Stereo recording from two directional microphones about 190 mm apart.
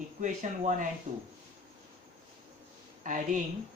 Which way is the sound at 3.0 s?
45° right (ahead or behind).